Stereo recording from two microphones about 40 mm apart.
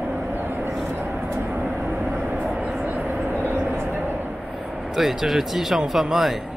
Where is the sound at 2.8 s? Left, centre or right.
Right.